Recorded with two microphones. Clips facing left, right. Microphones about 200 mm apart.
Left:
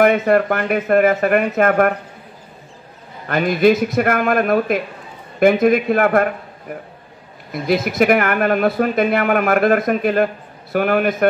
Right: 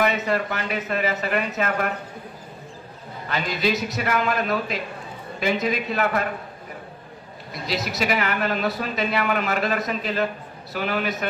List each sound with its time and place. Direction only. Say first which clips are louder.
0.0 s speech: left 9 dB; 55° left (ahead or behind)
3.3 s a man's voice: left 10 dB; 55° left (ahead or behind)
7.5 s speech: left 10 dB; 55° left (ahead or behind)